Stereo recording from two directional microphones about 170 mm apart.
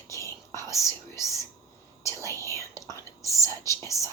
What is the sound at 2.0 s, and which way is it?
Whispering, 20° left (ahead or behind).